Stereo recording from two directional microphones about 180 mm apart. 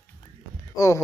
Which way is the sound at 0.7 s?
15° left (ahead or behind).